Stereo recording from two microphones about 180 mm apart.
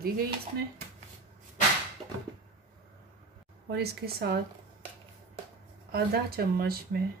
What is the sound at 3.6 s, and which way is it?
Speech, 65° right (ahead or behind).